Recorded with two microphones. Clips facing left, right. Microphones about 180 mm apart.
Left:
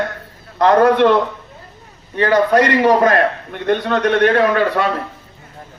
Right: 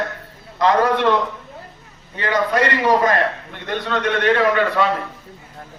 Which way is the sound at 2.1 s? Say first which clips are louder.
Left 6 dB; 60° left (ahead or behind).